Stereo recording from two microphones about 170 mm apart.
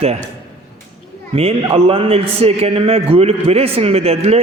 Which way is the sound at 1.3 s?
35° right (ahead or behind).